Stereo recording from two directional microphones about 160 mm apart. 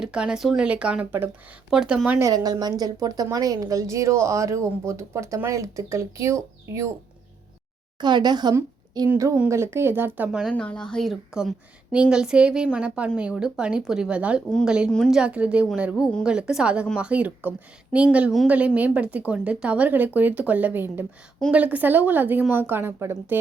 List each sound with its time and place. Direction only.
0.0 s a woman's voice: 5° right (ahead or behind)
8.0 s a woman's voice: 25° right (ahead or behind); by 10.5 s 5° right (ahead or behind)
10.5 s a woman's voice: 5° left (ahead or behind); by 23.4 s 15° right (ahead or behind)